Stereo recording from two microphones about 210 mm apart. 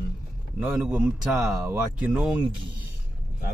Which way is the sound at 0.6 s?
5° right (ahead or behind).